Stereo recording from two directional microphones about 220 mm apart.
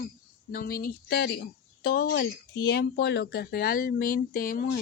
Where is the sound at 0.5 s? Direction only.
40° left (ahead or behind).